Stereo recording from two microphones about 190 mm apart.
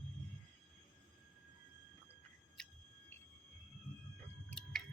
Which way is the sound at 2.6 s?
5° left (ahead or behind).